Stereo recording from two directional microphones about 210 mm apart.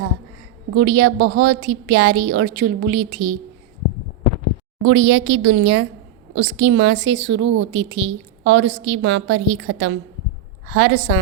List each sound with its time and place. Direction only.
0.8 s a woman's voice: 50° right (ahead or behind)
4.8 s a woman's voice: 65° right (ahead or behind)